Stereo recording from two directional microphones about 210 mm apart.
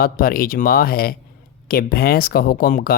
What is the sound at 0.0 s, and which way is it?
Speech, 45° left (ahead or behind).